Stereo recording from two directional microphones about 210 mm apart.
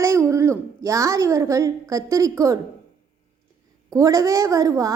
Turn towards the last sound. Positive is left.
turn(degrees=-15)  # may be behind; listen again after turning